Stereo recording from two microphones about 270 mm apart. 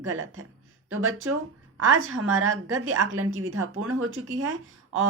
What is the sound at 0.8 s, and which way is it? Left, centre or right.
A woman's voice, right.